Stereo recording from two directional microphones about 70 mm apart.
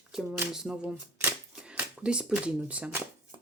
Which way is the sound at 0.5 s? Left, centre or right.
Centre.